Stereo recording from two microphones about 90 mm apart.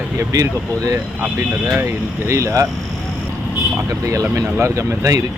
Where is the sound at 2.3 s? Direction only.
35° right (ahead or behind).